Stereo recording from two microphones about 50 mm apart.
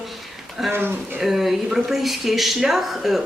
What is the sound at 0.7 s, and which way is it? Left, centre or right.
Speech, right.